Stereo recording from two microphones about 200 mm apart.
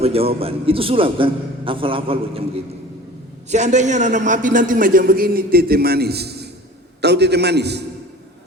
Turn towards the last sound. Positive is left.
turn(degrees=-55)  # may be behind; listen again after turning